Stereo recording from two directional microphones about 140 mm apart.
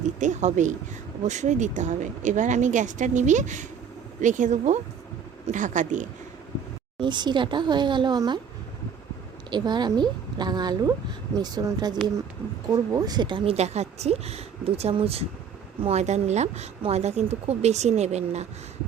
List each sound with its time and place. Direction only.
0.2 s a woman's voice: 60° right (ahead or behind)
7.0 s a woman's voice: 30° right (ahead or behind)
9.5 s a woman's voice: 30° right (ahead or behind); by 18.4 s 50° right (ahead or behind)